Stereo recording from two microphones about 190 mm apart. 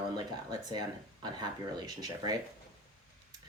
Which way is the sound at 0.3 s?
20° right (ahead or behind).